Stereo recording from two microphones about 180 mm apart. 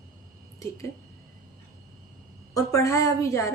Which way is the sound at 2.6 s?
15° left (ahead or behind).